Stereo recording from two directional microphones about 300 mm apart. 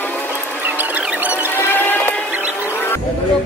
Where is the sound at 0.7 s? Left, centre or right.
Centre.